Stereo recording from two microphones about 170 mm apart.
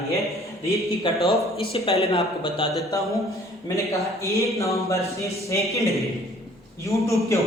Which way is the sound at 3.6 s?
20° left (ahead or behind).